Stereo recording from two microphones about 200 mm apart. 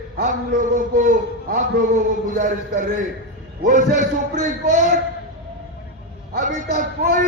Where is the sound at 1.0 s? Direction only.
40° right (ahead or behind).